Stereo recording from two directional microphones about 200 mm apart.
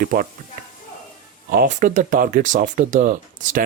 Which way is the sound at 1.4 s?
45° right (ahead or behind).